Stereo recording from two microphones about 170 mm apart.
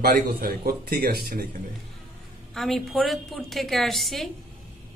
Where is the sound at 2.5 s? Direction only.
Centre (ahead or behind).